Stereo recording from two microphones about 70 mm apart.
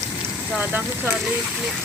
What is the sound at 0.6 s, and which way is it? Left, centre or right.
Speech, right.